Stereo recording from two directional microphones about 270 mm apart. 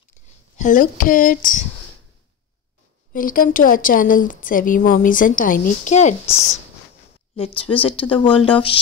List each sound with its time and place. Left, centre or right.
0.6 s speech: left
3.1 s a woman's voice: left